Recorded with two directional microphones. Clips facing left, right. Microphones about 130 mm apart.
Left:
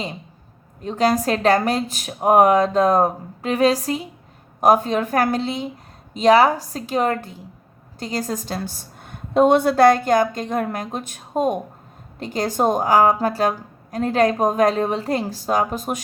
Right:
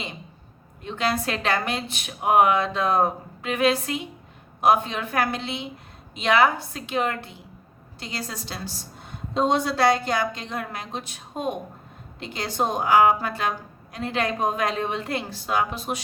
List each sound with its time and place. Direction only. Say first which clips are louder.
0.8 s a woman's voice: left 7 dB; 40° left (ahead or behind)